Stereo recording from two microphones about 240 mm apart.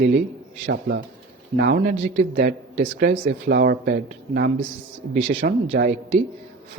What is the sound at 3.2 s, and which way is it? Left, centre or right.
Speech, right.